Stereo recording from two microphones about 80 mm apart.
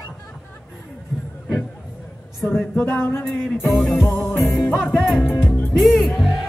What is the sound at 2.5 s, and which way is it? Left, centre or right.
Music, centre.